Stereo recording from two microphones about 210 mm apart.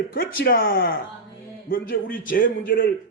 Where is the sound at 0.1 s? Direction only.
45° left (ahead or behind).